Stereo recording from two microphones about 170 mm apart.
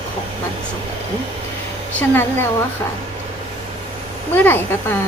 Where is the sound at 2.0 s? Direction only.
15° left (ahead or behind).